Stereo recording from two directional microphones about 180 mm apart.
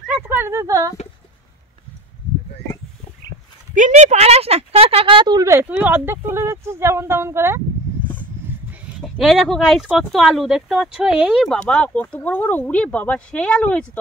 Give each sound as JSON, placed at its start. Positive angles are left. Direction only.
{"t": 0.0, "sound": "a sound", "side_deg": -10}
{"t": 3.7, "sound": "speech", "side_deg": -40}
{"t": 9.0, "sound": "speech", "side_deg": 0}